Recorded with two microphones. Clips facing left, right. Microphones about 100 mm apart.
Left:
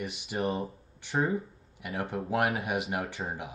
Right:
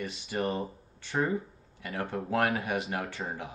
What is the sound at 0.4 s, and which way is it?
Speech, 15° left (ahead or behind).